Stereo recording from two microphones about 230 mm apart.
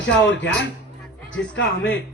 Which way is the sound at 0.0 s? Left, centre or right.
Left.